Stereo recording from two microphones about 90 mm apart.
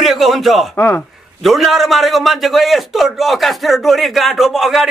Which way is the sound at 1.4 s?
Centre (ahead or behind).